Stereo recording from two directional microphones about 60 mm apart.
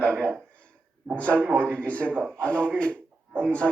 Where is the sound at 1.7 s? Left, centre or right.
Left.